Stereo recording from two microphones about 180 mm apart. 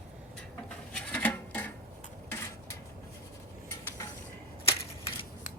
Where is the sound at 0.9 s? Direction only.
10° left (ahead or behind).